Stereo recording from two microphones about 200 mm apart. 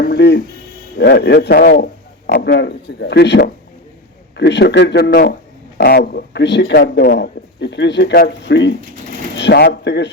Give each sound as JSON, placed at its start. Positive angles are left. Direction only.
{"t": 0.0, "sound": "speech", "side_deg": 55}